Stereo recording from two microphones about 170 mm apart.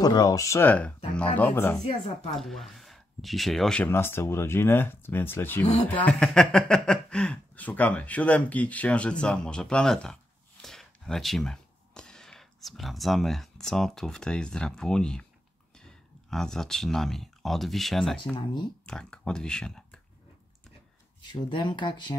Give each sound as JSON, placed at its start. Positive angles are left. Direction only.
{"t": 0.0, "sound": "speech", "side_deg": 20}
{"t": 1.8, "sound": "speech", "side_deg": 35}
{"t": 2.3, "sound": "speech", "side_deg": 0}
{"t": 18.3, "sound": "speech", "side_deg": 25}
{"t": 18.9, "sound": "speech", "side_deg": 5}
{"t": 21.3, "sound": "speech", "side_deg": 25}